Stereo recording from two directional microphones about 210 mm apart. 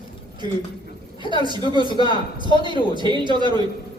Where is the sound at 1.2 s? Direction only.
25° left (ahead or behind).